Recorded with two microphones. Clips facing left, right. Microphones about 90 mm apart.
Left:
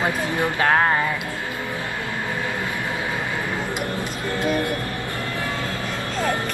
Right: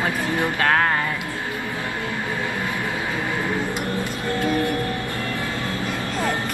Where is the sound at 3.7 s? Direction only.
20° left (ahead or behind).